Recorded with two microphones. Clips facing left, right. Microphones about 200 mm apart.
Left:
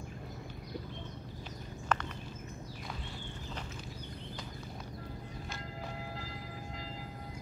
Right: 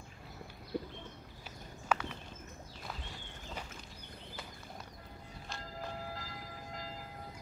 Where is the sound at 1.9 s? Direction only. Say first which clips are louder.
Even; 5° right (ahead or behind).